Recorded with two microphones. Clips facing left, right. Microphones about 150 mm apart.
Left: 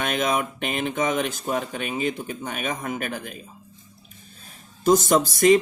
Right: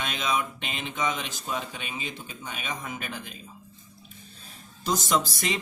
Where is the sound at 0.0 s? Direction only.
50° left (ahead or behind).